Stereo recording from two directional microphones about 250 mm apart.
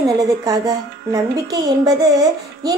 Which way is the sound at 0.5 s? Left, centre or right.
Centre.